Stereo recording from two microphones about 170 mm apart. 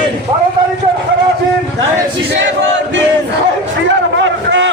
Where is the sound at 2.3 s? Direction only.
90° right.